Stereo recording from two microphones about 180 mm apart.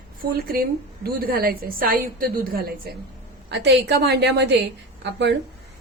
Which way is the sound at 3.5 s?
70° right (ahead or behind).